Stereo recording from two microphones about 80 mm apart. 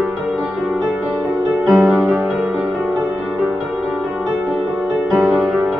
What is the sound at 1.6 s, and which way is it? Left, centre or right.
Music, centre.